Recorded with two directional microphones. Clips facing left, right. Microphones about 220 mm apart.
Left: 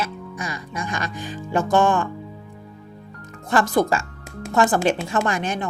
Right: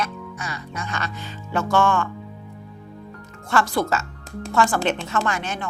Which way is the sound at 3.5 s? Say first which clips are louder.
Left 3 dB; 20° left (ahead or behind).